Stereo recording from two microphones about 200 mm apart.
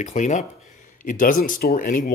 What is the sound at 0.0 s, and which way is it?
Speech, 35° left (ahead or behind).